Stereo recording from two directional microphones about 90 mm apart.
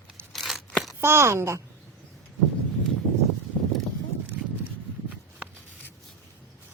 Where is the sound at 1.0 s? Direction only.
30° right (ahead or behind).